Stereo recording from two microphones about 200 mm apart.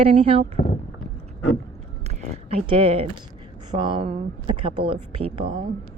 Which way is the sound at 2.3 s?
30° right (ahead or behind).